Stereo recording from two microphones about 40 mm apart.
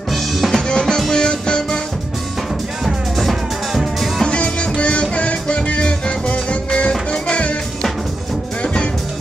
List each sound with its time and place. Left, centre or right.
0.1 s drum kit: centre
0.6 s music: centre
2.8 s music: centre
4.2 s music: left